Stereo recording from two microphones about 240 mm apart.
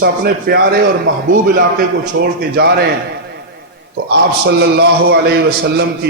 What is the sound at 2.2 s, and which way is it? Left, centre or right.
Speech, right.